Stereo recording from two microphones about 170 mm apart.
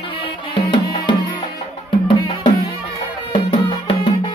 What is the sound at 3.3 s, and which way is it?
Music, 35° left (ahead or behind).